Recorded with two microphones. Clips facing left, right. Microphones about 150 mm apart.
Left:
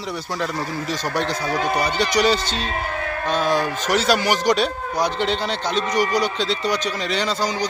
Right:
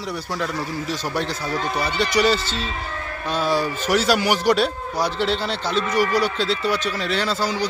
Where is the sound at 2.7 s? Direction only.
60° left (ahead or behind).